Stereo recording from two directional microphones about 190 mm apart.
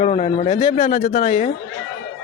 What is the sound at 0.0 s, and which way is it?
Speech, 35° left (ahead or behind).